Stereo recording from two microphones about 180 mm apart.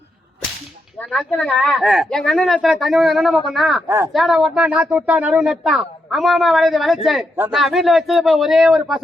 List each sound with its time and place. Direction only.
0.9 s speech: 5° left (ahead or behind)
3.8 s speech: 15° right (ahead or behind)
4.1 s speech: centre (ahead or behind)